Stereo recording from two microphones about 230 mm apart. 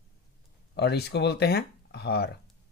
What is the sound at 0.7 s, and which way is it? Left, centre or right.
Speech, left.